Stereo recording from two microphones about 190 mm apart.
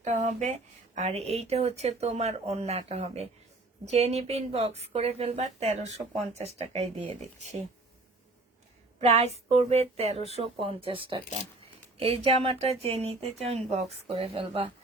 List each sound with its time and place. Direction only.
0.0 s speech: 35° right (ahead or behind)
9.0 s speech: 35° right (ahead or behind)